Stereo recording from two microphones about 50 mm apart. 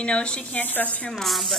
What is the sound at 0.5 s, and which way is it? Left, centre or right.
Speech, left.